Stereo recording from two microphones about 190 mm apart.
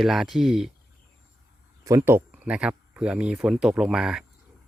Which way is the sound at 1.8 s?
15° right (ahead or behind).